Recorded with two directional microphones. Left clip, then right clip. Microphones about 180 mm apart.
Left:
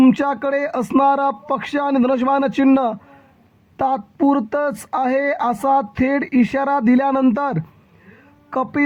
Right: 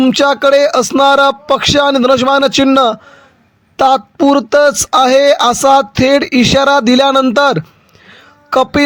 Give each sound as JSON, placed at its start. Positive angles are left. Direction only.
{"t": 0.1, "sound": "speech", "side_deg": -35}